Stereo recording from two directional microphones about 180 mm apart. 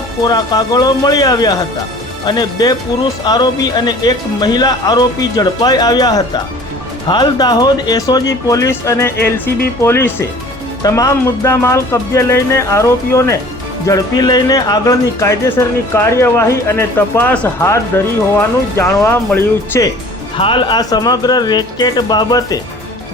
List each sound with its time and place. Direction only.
0.3 s speech: 20° left (ahead or behind)
20.3 s speech: 30° left (ahead or behind)